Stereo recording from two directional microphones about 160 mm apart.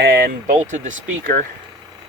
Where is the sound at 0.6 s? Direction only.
55° right (ahead or behind).